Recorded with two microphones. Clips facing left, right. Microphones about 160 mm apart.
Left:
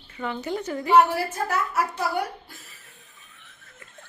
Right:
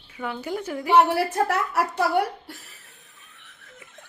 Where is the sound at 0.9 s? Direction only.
70° right (ahead or behind).